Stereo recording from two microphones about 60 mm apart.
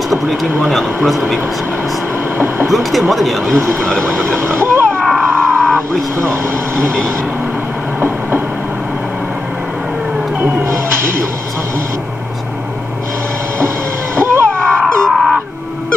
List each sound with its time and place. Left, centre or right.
0.1 s speech: centre
2.3 s vehicle: right
2.7 s speech: centre
4.0 s speech: right
5.0 s a sound: centre
6.1 s speech: right
10.3 s music: right
14.1 s vehicle: right
14.8 s a sound: centre